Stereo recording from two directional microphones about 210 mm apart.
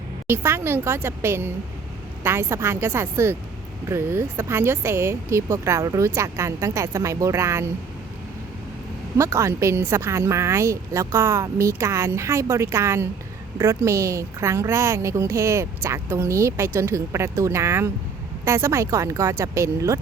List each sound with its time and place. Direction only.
0.3 s a woman's voice: 10° right (ahead or behind)
9.1 s a woman's voice: 15° right (ahead or behind)